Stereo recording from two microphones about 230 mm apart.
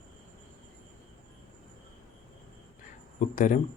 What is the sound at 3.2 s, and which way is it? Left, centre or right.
Speech, left.